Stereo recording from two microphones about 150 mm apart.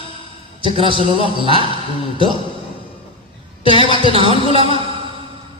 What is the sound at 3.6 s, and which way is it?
Speech, 35° left (ahead or behind).